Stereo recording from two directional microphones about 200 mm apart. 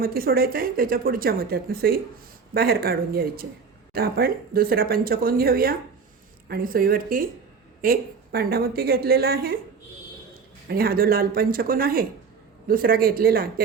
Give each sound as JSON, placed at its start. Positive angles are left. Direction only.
{"t": 0.0, "sound": "speech", "side_deg": -45}
{"t": 10.7, "sound": "speech", "side_deg": -50}